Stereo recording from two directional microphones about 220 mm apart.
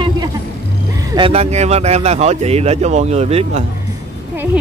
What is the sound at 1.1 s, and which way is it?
A man's voice, 25° right (ahead or behind).